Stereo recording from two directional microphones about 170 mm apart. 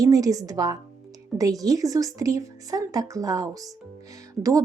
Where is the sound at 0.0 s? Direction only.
20° right (ahead or behind).